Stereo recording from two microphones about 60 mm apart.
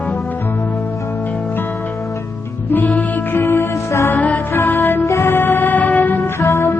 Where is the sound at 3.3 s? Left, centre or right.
Left.